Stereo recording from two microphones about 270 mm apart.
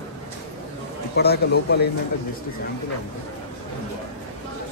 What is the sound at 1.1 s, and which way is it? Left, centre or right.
Speech, left.